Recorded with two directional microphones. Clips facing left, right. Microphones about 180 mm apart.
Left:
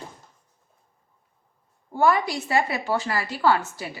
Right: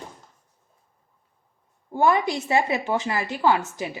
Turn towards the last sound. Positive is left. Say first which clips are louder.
# even
turn(degrees=-20)  # may be behind; listen again after turning